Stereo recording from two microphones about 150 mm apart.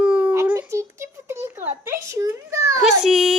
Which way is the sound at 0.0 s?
10° right (ahead or behind).